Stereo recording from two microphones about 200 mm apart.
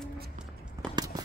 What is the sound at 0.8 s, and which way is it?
Walk, 15° right (ahead or behind).